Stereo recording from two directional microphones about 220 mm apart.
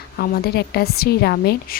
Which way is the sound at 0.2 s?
45° left (ahead or behind).